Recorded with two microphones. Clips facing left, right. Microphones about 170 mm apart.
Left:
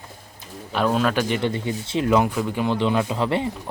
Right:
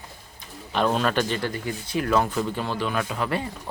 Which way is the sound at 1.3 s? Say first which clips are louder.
Left 5 dB; 25° left (ahead or behind).